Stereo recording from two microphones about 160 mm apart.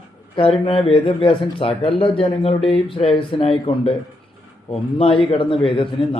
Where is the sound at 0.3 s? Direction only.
35° left (ahead or behind).